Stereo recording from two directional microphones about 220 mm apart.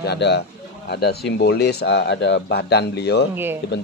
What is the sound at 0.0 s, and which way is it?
Speech, 50° left (ahead or behind).